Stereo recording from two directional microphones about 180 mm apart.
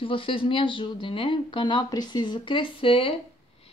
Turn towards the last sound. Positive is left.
turn(degrees=30)  # may be behind; listen again after turning